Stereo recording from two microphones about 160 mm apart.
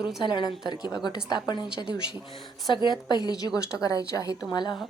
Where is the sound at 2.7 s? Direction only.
30° left (ahead or behind).